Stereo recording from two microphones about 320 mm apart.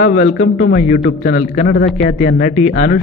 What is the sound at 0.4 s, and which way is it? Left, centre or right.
Speech, left.